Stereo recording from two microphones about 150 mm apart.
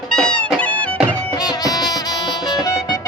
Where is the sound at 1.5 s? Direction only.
25° left (ahead or behind).